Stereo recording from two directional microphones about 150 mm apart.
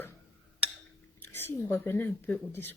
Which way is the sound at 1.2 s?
15° left (ahead or behind).